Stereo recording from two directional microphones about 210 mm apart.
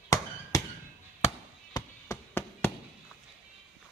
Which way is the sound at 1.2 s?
30° left (ahead or behind).